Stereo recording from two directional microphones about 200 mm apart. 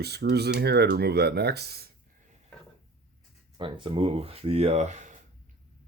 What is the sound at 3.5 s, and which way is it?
Speech, 25° right (ahead or behind).